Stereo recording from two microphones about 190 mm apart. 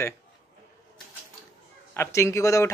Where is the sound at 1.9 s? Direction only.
15° left (ahead or behind).